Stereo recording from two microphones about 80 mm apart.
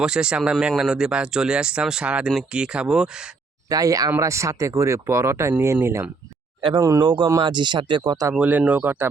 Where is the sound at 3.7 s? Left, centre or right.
Right.